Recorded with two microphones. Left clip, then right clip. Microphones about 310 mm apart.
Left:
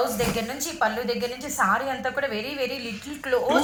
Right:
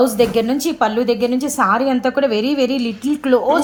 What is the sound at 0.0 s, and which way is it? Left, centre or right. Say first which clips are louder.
A woman's voice: right 11 dB; right.